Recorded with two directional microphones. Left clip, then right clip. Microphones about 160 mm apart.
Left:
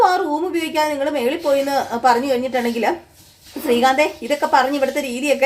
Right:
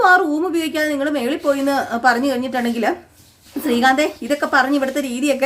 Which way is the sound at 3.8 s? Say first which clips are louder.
Right 2 dB; 25° right (ahead or behind).